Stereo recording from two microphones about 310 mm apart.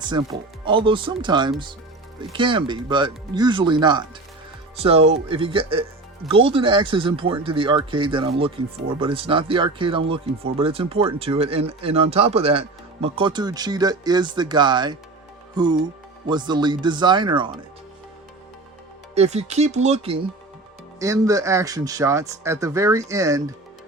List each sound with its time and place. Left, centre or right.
0.0 s speech: centre
19.1 s speech: right